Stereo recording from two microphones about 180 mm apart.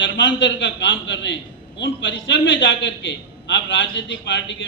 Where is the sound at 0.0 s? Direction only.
90° left.